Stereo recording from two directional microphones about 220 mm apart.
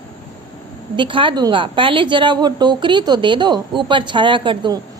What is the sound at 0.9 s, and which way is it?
A woman's voice, 20° right (ahead or behind).